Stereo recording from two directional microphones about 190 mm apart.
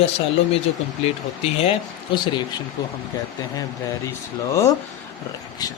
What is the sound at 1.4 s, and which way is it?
Speech, 30° left (ahead or behind).